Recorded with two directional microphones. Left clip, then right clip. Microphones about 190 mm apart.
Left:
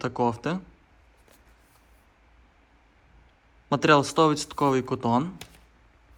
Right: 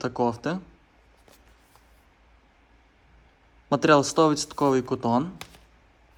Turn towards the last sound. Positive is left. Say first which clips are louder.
# even
turn(degrees=-15)  # may be behind; listen again after turning